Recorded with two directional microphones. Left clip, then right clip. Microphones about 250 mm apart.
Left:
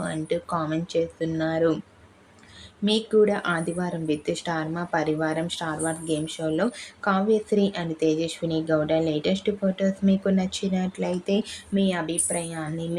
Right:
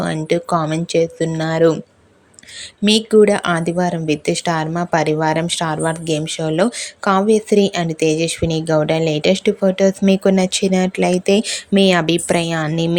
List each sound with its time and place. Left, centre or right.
0.0 s speech: right
2.8 s speech: right